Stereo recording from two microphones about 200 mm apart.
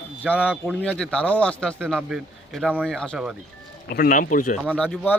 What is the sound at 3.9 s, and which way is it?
Speech, 45° left (ahead or behind).